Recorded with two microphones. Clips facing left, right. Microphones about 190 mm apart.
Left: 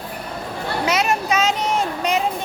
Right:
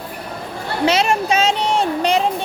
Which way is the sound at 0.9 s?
30° right (ahead or behind).